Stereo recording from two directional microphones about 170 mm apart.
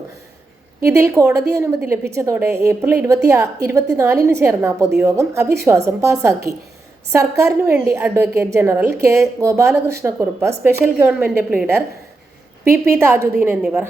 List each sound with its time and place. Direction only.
0.9 s a woman's voice: 15° right (ahead or behind)
12.6 s a woman's voice: 15° right (ahead or behind)